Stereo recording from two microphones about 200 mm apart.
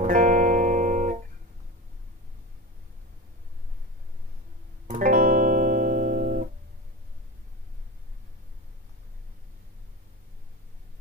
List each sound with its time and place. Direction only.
0.0 s music: 40° right (ahead or behind)
4.8 s music: 40° right (ahead or behind)